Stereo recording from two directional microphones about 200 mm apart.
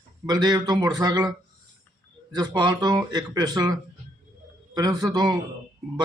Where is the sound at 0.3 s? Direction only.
20° right (ahead or behind).